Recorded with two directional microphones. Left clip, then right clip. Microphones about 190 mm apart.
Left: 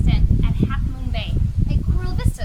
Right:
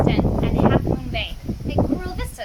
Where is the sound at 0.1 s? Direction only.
15° right (ahead or behind).